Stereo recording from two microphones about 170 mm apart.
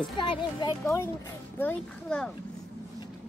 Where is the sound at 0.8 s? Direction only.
15° left (ahead or behind).